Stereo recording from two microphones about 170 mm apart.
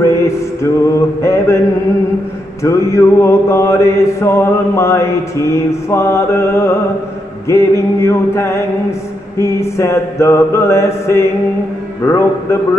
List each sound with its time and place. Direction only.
0.0 s music: 15° left (ahead or behind)
1.2 s mantra: 15° left (ahead or behind)
2.6 s mantra: 15° left (ahead or behind)